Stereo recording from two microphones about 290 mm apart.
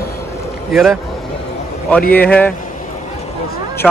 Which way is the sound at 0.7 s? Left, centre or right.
Centre.